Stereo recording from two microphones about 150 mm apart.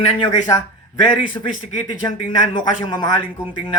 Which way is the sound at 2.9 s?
25° left (ahead or behind).